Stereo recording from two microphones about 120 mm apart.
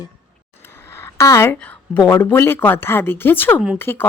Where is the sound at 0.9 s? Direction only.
20° left (ahead or behind).